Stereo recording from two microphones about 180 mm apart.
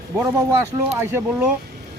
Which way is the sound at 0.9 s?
15° right (ahead or behind).